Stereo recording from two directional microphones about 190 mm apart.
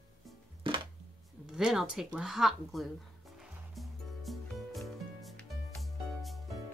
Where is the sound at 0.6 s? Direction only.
25° right (ahead or behind).